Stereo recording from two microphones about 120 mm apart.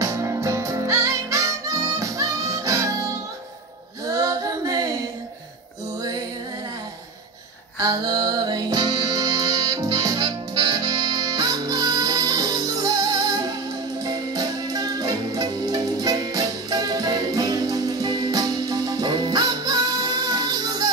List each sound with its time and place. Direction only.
0.0 s music: 25° right (ahead or behind)
4.0 s female singing: 30° right (ahead or behind)
7.8 s music: 35° right (ahead or behind)